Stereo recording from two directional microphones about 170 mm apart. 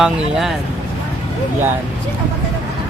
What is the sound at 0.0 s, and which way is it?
Speech, centre (ahead or behind).